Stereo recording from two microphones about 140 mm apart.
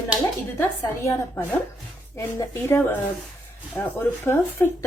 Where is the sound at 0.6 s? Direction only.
20° left (ahead or behind).